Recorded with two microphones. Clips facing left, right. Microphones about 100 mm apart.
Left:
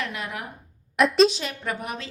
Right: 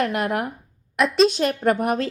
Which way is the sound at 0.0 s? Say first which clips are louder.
Right 10 dB; 55° right (ahead or behind).